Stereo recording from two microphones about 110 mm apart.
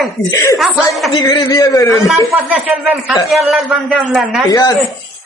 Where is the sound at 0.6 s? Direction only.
Centre (ahead or behind).